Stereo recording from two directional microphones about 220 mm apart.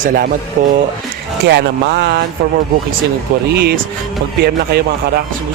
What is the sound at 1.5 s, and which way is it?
Speech, 50° right (ahead or behind).